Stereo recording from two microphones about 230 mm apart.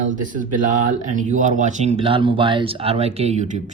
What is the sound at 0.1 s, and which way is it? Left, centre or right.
Speech, right.